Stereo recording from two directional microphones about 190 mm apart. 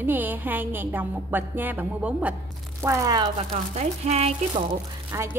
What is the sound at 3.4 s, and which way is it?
Speech, 35° right (ahead or behind).